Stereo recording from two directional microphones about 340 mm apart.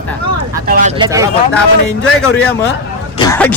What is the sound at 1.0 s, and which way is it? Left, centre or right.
Speech, centre.